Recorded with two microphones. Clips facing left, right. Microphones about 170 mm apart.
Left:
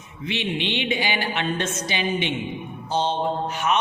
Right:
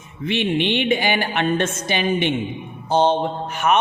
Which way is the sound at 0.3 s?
55° right (ahead or behind).